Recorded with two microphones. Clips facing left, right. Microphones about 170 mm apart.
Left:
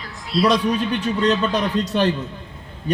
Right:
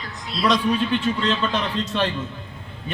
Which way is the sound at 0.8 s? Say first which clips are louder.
Left 1 dB; 40° left (ahead or behind).